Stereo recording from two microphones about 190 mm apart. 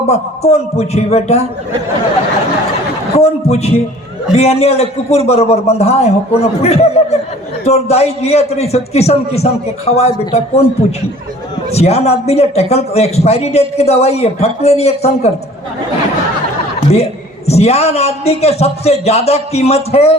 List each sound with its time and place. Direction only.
0.1 s a man's voice: 35° left (ahead or behind)
3.2 s a man's voice: 35° left (ahead or behind)
11.7 s a man's voice: 35° left (ahead or behind)
16.9 s a man's voice: 35° left (ahead or behind)